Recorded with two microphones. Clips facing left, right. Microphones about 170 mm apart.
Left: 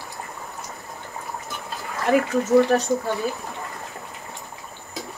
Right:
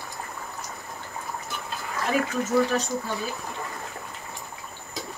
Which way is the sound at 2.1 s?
60° left (ahead or behind).